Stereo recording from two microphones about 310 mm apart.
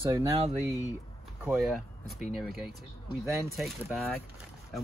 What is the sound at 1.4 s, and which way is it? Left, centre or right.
Speech, centre.